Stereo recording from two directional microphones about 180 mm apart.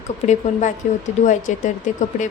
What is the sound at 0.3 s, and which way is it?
Speech, 40° left (ahead or behind).